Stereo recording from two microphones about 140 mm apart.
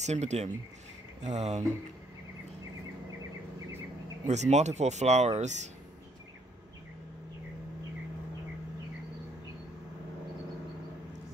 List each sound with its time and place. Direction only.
0.0 s speech: 55° right (ahead or behind)
4.3 s speech: 55° right (ahead or behind)